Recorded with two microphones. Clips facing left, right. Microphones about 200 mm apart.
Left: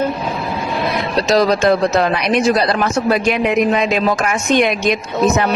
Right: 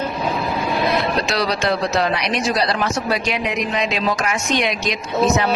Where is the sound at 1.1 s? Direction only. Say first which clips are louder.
Left 7 dB; 40° left (ahead or behind).